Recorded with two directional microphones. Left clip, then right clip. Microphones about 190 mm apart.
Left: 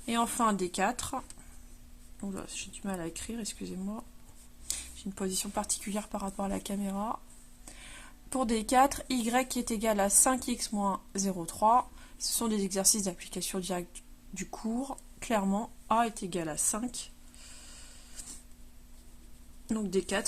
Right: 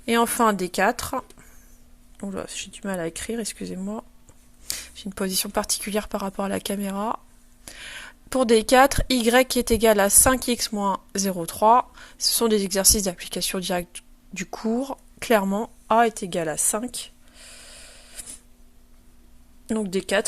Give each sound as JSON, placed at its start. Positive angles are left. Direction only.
{"t": 0.0, "sound": "speech", "side_deg": -35}
{"t": 2.2, "sound": "speech", "side_deg": -35}
{"t": 19.6, "sound": "speech", "side_deg": -35}